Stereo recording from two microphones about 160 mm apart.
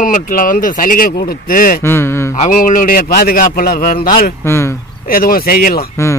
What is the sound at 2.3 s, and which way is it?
A man's voice, 50° left (ahead or behind).